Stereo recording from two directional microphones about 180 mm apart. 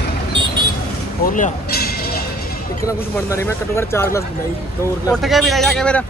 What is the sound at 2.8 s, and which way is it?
Speech, 15° left (ahead or behind).